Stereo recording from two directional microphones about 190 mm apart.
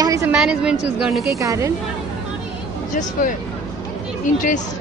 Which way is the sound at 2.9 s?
45° left (ahead or behind).